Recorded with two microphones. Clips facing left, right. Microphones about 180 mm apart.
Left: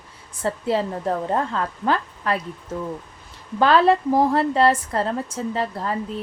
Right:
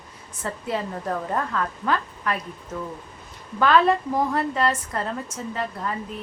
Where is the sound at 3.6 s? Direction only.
30° left (ahead or behind).